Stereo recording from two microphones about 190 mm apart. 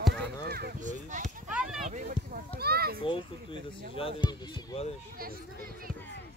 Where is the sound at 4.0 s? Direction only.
30° left (ahead or behind).